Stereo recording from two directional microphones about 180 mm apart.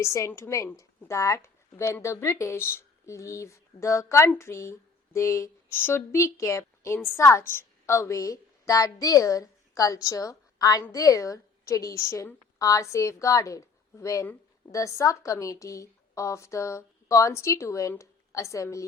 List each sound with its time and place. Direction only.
0.0 s a woman's voice: 15° left (ahead or behind)